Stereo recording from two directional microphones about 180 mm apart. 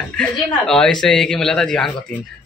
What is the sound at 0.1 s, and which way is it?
Speech, 5° left (ahead or behind).